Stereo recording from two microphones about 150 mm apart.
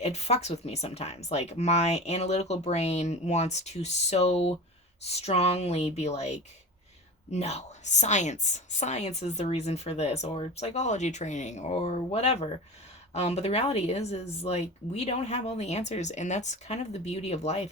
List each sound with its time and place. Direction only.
0.0 s a woman's voice: 45° left (ahead or behind)